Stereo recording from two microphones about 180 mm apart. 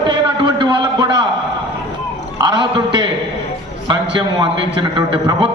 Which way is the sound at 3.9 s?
25° right (ahead or behind).